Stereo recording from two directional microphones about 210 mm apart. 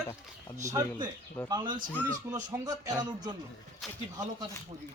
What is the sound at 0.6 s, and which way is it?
Speech, 15° right (ahead or behind).